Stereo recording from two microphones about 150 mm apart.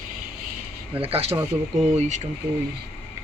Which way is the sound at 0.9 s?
40° right (ahead or behind).